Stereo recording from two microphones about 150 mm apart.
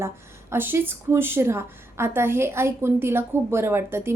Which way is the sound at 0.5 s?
15° right (ahead or behind).